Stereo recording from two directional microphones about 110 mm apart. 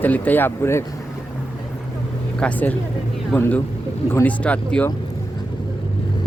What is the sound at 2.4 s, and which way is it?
Speech, 15° left (ahead or behind).